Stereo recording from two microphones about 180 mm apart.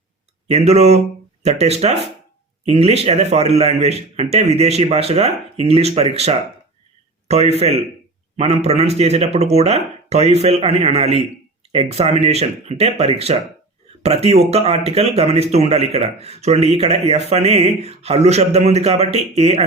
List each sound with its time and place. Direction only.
0.5 s speech: 35° right (ahead or behind)